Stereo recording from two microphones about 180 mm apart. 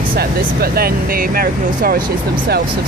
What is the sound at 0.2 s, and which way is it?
Speech, 55° right (ahead or behind).